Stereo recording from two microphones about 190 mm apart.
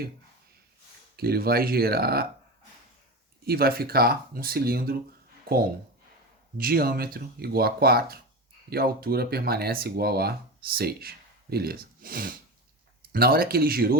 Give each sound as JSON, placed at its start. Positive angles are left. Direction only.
{"t": 1.1, "sound": "speech", "side_deg": -55}
{"t": 3.4, "sound": "speech", "side_deg": -55}
{"t": 6.6, "sound": "speech", "side_deg": -50}